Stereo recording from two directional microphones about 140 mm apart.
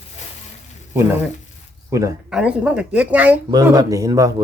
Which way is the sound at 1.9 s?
20° right (ahead or behind).